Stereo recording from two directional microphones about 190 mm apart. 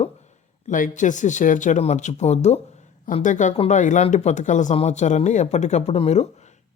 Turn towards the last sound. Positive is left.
turn(degrees=35)  # may be behind; listen again after turning